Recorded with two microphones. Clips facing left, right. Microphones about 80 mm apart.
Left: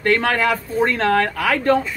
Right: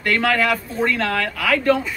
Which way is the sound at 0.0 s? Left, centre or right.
Left.